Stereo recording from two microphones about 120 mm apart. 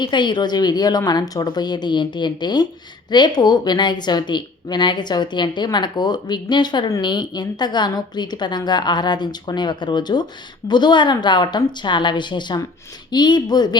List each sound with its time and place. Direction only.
0.0 s a woman's voice: 40° left (ahead or behind)